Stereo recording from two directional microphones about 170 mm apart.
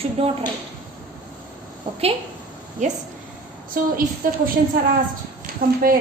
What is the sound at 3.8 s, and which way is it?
Speech, 60° right (ahead or behind).